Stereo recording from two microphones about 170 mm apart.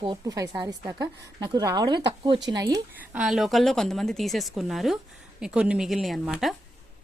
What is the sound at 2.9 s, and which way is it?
Speech, 10° right (ahead or behind).